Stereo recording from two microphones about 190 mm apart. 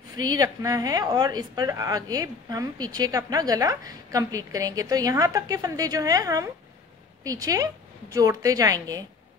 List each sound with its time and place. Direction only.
0.1 s a woman's voice: 20° right (ahead or behind)